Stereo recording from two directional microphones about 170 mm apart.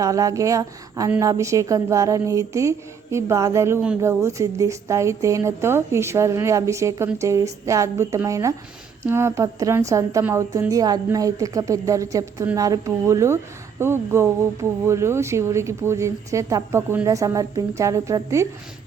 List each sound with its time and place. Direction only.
0.0 s a woman's voice: 20° right (ahead or behind)